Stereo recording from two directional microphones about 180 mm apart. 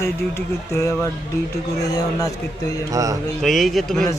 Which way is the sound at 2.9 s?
20° right (ahead or behind).